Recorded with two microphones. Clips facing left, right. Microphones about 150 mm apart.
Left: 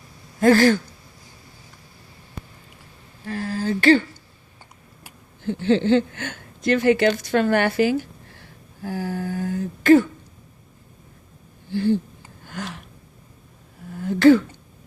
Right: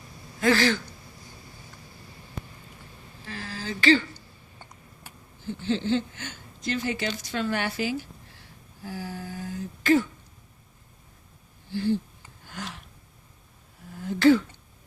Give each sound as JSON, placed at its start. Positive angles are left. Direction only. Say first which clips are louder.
{"t": 0.3, "sound": "speech", "louder": "left 7 dB", "side_deg": 45}
{"t": 3.2, "sound": "speech", "louder": "left 10 dB", "side_deg": 50}
{"t": 5.4, "sound": "a woman's voice", "louder": "left 8 dB", "side_deg": 65}
{"t": 11.7, "sound": "speech", "louder": "left 5 dB", "side_deg": 55}
{"t": 12.5, "sound": "gasp", "louder": "left 5 dB", "side_deg": 60}
{"t": 14.0, "sound": "a sound", "louder": "left 5 dB", "side_deg": 60}